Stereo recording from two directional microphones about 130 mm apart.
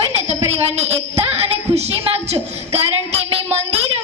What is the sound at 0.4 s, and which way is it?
A woman's voice, 55° right (ahead or behind).